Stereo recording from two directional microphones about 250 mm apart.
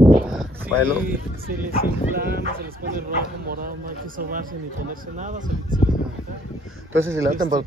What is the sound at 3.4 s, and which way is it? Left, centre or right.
Speech, right.